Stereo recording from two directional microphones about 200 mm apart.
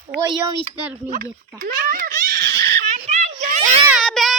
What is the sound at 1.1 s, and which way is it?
A child's voice, 45° right (ahead or behind).